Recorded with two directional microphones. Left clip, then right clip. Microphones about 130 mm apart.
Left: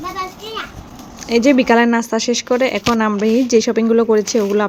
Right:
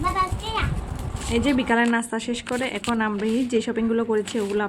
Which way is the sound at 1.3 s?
30° left (ahead or behind).